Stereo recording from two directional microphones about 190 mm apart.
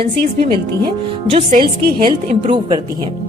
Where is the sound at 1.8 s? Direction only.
50° right (ahead or behind).